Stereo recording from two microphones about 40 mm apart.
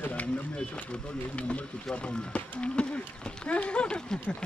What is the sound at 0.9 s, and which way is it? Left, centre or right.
Speech, left.